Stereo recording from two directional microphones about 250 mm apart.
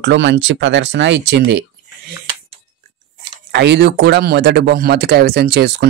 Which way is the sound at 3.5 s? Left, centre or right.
Right.